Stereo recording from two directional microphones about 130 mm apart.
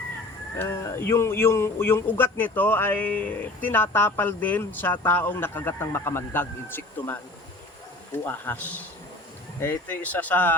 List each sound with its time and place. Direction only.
0.5 s speech: 20° left (ahead or behind)
8.2 s speech: 15° left (ahead or behind)